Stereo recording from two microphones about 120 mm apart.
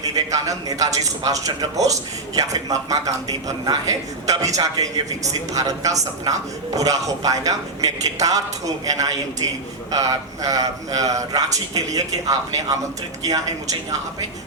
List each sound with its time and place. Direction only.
0.0 s speech: 30° right (ahead or behind)